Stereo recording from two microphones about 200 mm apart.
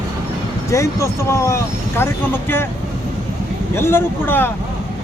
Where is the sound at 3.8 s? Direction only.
10° left (ahead or behind).